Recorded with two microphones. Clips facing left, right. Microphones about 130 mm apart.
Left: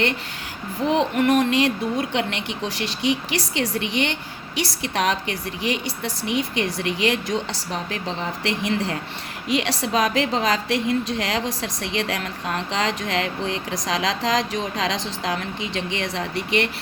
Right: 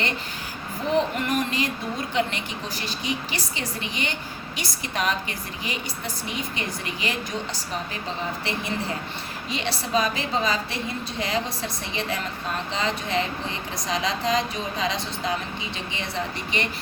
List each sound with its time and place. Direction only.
0.9 s speech: 75° left (ahead or behind)
8.4 s a woman's voice: 90° left